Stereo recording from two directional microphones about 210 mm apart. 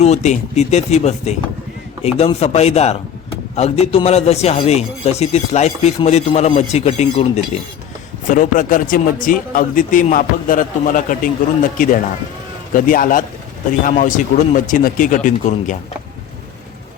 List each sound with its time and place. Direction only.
0.0 s a man's voice: 30° left (ahead or behind)
12.7 s a man's voice: 40° left (ahead or behind)